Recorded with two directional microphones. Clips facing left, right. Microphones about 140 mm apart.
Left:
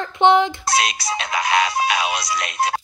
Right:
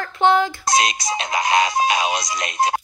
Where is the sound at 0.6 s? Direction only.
20° right (ahead or behind).